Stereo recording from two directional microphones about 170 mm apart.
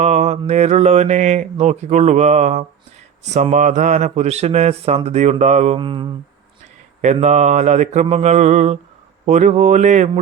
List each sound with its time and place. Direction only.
0.0 s mantra: 40° right (ahead or behind)
5.8 s speech: 30° right (ahead or behind)
7.0 s mantra: 40° right (ahead or behind)